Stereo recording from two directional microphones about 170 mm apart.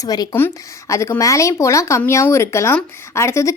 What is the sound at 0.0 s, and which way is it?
Speech, 20° left (ahead or behind).